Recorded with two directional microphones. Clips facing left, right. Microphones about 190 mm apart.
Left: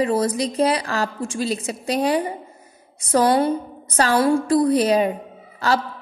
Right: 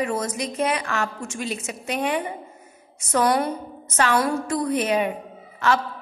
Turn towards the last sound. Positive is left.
turn(degrees=35)  # may be behind; listen again after turning